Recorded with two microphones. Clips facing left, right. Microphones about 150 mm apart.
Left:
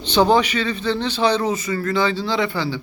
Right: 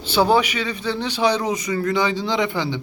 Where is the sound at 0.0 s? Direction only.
10° right (ahead or behind).